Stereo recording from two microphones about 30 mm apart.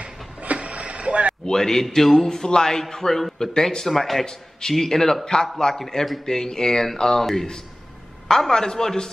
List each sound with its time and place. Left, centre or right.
0.0 s vehicle: right
1.4 s a man's voice: centre
4.3 s a man's voice: left
8.3 s a man's voice: centre